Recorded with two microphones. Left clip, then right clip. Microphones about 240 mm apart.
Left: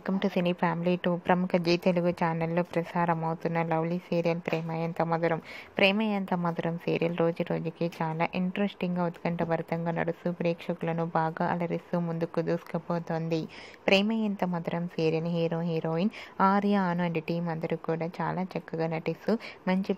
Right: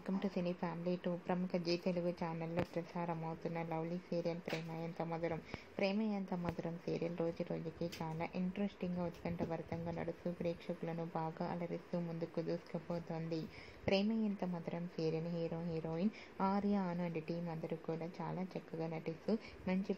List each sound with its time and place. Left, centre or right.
0.0 s a woman's voice: left